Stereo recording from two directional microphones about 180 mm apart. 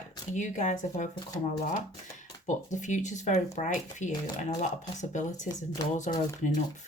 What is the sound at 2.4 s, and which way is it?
Speech, 45° left (ahead or behind).